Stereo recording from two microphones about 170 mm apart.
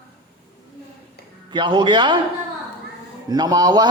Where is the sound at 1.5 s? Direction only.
30° right (ahead or behind).